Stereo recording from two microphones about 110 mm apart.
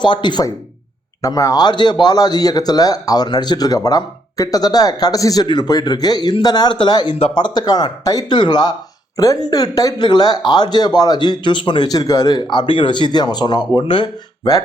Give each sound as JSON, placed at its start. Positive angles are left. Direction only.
{"t": 0.0, "sound": "speech", "side_deg": 45}
{"t": 1.2, "sound": "speech", "side_deg": 30}
{"t": 7.1, "sound": "speech", "side_deg": 55}